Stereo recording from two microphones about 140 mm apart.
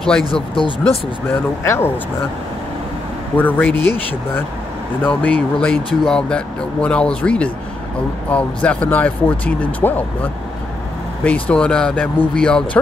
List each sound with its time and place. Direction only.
0.3 s speech: 35° left (ahead or behind)
0.8 s speech: 15° left (ahead or behind)
3.3 s speech: 10° left (ahead or behind)